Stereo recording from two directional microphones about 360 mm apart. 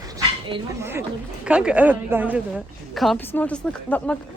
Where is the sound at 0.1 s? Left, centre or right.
Centre.